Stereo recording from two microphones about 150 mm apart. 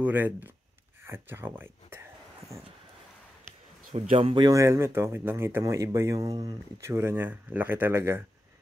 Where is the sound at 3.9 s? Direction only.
40° right (ahead or behind).